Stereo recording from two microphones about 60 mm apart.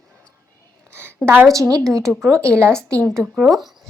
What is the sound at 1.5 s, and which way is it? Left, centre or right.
Speech, right.